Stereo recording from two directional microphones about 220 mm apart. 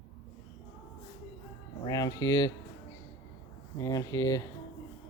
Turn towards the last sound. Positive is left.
turn(degrees=15)  # may be behind; listen again after turning